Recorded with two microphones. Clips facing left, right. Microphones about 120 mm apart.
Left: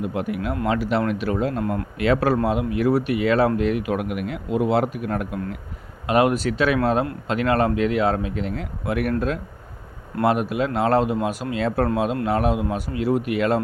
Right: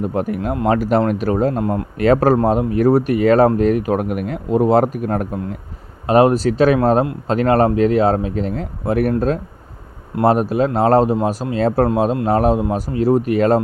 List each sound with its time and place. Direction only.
0.0 s speech: 40° right (ahead or behind)
1.6 s speech: 30° right (ahead or behind)
2.0 s speech: 40° right (ahead or behind)
10.2 s speech: 35° right (ahead or behind)